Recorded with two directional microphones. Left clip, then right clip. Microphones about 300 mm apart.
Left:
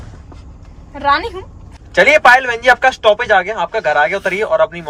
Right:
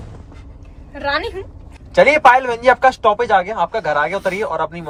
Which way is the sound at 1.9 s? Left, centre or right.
Centre.